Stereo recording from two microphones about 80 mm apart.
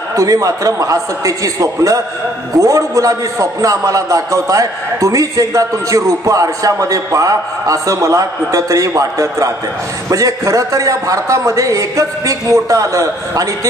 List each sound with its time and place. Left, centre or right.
0.1 s a man's voice: right